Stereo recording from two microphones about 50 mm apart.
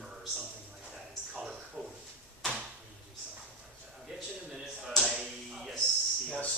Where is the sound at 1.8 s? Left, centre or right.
Right.